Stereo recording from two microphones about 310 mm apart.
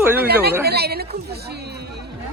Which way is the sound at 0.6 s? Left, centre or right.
Right.